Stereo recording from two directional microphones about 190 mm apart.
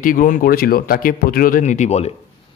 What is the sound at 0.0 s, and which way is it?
Speech, 45° left (ahead or behind).